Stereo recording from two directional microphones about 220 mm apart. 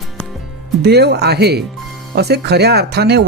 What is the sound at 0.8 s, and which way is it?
Speech, 50° right (ahead or behind).